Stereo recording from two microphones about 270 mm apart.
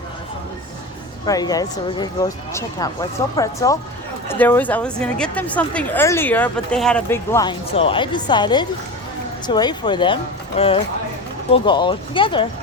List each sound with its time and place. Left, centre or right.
1.2 s speech: centre